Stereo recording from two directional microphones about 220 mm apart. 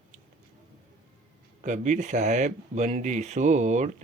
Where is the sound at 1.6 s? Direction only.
35° right (ahead or behind).